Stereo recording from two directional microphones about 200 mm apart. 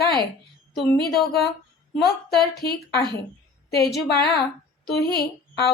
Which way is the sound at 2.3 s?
50° left (ahead or behind).